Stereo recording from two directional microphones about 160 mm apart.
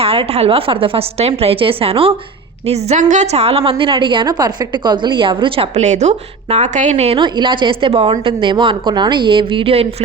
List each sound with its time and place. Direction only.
0.0 s a woman's voice: 40° right (ahead or behind)
7.2 s a woman's voice: 30° right (ahead or behind)